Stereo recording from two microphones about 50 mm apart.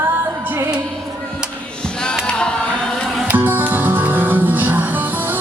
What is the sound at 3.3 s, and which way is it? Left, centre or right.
Music, right.